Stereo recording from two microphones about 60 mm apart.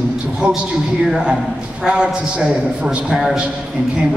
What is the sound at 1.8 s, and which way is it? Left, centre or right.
A man's voice, centre.